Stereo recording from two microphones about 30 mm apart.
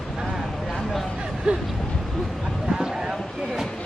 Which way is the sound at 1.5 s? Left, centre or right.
Right.